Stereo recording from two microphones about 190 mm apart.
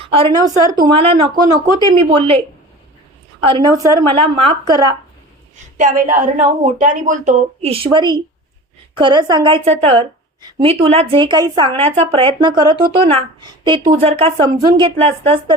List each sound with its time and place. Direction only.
0.1 s a woman's voice: 25° right (ahead or behind)
3.4 s a woman's voice: 20° right (ahead or behind)
5.7 s a woman's voice: 45° right (ahead or behind)
7.9 s a woman's voice: 20° right (ahead or behind)